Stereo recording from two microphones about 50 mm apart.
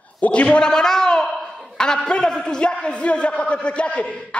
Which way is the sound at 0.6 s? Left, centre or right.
Centre.